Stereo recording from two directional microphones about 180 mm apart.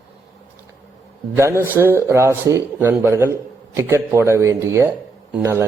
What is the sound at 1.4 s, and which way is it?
A man's voice, 15° right (ahead or behind).